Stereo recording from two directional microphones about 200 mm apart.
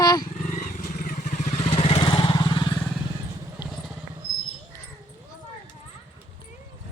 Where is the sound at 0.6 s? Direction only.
40° left (ahead or behind); by 2.6 s 20° left (ahead or behind).